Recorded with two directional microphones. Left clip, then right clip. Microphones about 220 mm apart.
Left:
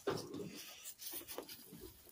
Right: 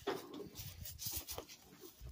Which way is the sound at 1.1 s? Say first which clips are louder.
Right 1 dB; 50° right (ahead or behind).